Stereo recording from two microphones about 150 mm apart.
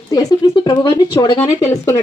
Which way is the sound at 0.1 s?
25° left (ahead or behind).